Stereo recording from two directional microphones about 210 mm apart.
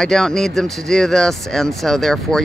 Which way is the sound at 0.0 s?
Centre (ahead or behind).